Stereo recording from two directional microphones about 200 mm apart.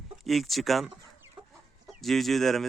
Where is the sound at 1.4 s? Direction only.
25° right (ahead or behind).